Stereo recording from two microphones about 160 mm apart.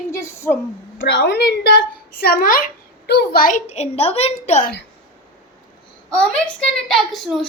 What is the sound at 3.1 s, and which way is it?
Speech, 80° left.